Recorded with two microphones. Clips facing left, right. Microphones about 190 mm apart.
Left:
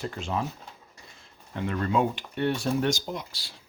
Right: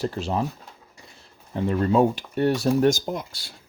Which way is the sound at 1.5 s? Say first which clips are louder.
Right 6 dB; 35° right (ahead or behind).